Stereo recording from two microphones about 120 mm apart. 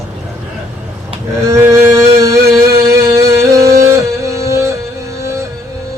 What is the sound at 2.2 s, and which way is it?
Music, 25° right (ahead or behind).